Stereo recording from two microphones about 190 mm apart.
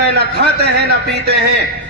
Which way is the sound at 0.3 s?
60° right (ahead or behind).